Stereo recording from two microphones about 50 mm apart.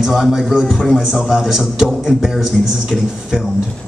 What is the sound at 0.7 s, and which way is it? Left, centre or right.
Speech, centre.